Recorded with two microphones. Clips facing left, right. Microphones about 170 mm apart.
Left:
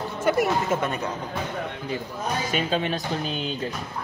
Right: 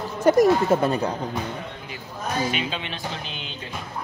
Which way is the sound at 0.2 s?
40° right (ahead or behind).